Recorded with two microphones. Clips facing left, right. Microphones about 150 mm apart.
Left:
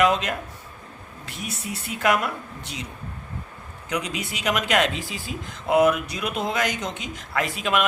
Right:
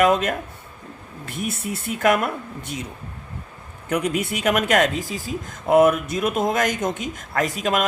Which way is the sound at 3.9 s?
55° right (ahead or behind).